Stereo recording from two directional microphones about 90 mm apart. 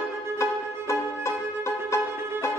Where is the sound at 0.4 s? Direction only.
35° left (ahead or behind).